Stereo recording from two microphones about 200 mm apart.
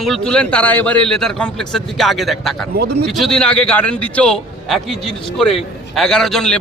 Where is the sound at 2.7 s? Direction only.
55° right (ahead or behind).